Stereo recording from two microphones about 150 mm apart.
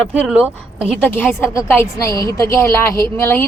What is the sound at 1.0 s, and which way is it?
A woman's voice, 15° left (ahead or behind).